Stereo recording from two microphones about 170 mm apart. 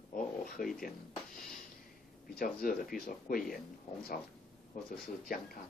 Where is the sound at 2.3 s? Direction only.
55° left (ahead or behind).